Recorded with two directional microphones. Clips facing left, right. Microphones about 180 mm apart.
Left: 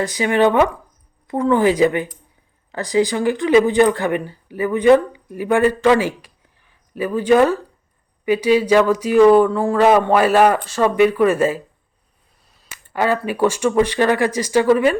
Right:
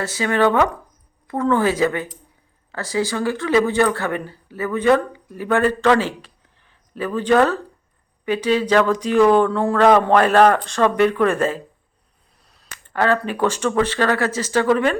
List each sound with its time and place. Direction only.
0.0 s speech: 15° left (ahead or behind)
12.5 s a sound: centre (ahead or behind)
12.9 s speech: 10° left (ahead or behind)